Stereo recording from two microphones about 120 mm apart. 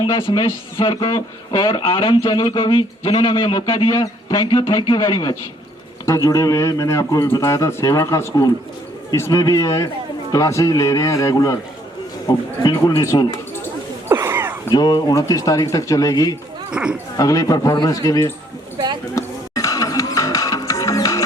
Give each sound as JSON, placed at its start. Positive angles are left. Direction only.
{"t": 0.0, "sound": "a man's voice", "side_deg": 45}
{"t": 12.6, "sound": "a man's voice", "side_deg": 40}
{"t": 14.1, "sound": "a sound", "side_deg": -20}
{"t": 14.7, "sound": "speech", "side_deg": 35}
{"t": 16.7, "sound": "speech", "side_deg": -5}
{"t": 17.2, "sound": "speech", "side_deg": 30}
{"t": 19.1, "sound": "music", "side_deg": 30}